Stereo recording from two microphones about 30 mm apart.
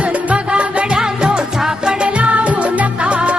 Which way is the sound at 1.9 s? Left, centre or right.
Right.